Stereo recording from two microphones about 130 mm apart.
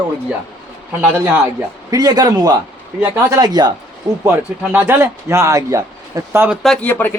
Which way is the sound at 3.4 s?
30° right (ahead or behind).